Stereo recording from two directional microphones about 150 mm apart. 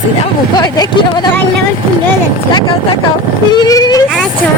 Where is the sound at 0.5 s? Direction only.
30° left (ahead or behind).